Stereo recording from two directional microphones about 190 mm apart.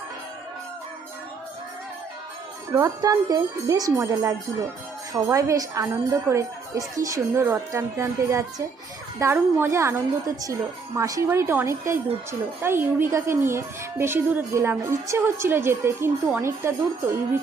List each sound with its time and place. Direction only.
2.7 s speech: 15° right (ahead or behind)